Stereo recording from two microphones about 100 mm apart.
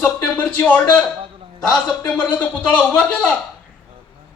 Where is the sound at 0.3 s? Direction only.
15° left (ahead or behind).